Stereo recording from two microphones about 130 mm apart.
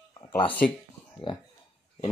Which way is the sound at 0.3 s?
15° left (ahead or behind).